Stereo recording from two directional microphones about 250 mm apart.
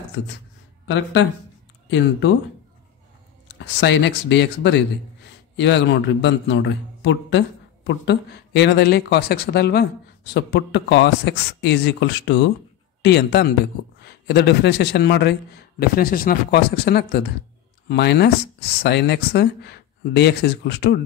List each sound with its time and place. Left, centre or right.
0.2 s a man's voice: left
1.9 s a man's voice: left
3.4 s a man's voice: left